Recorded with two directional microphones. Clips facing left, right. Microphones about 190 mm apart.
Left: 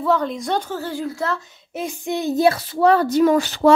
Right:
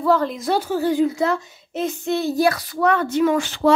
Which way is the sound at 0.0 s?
Centre (ahead or behind).